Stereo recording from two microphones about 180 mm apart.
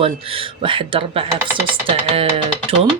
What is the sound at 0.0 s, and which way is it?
Speech, 30° right (ahead or behind).